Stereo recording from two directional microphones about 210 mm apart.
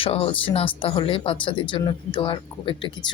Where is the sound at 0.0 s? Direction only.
25° left (ahead or behind).